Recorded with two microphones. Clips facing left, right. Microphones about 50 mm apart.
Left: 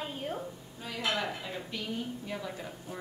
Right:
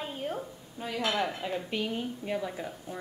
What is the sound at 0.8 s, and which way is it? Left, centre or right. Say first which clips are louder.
Dishes: right 3 dB; right.